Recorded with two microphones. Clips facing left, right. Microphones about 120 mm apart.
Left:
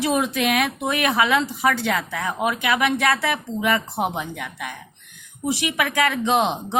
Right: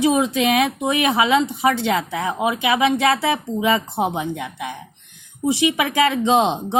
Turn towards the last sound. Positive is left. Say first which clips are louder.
# right 3 dB
turn(degrees=-25)  # may be behind; listen again after turning